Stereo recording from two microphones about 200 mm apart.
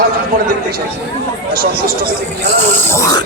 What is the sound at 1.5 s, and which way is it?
Speech, 50° right (ahead or behind).